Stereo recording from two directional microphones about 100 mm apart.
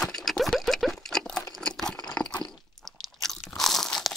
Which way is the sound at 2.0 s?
10° left (ahead or behind).